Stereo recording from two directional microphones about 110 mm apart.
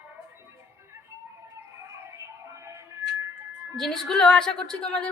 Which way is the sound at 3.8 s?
Centre (ahead or behind).